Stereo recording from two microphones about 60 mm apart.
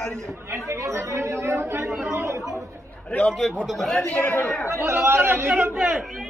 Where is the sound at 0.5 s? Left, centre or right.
Right.